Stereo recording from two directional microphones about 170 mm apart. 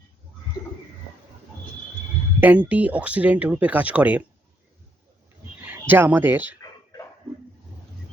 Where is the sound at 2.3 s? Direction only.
10° right (ahead or behind).